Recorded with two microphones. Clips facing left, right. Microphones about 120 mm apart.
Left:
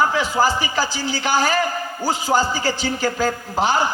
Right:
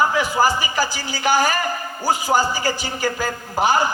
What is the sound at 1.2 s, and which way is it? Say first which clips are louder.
Speech: right 2 dB; 50° right (ahead or behind).